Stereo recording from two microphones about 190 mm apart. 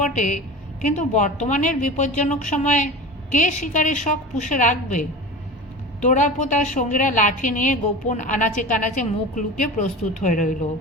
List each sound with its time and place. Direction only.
0.1 s a woman's voice: 40° left (ahead or behind)